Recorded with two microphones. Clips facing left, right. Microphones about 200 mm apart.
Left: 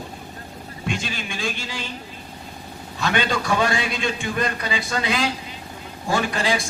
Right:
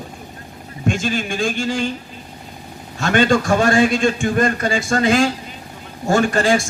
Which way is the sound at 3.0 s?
45° right (ahead or behind).